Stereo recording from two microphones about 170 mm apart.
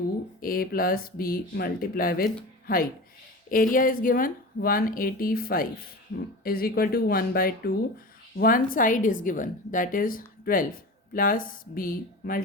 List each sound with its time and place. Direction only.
0.3 s a woman's voice: 60° left (ahead or behind)